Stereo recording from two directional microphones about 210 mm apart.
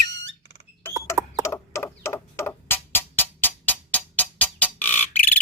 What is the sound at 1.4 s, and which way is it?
Music, 15° left (ahead or behind).